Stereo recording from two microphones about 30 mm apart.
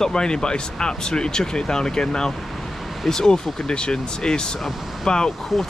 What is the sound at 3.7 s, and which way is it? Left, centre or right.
Speech, left.